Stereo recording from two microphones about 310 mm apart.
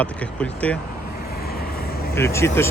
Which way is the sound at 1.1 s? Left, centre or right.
Left.